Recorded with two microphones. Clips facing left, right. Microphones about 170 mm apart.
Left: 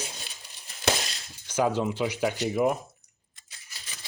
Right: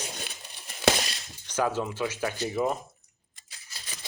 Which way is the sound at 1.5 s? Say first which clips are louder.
Left 2 dB; 15° left (ahead or behind).